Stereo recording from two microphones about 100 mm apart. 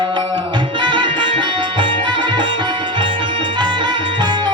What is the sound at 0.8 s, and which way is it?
Music, 50° right (ahead or behind).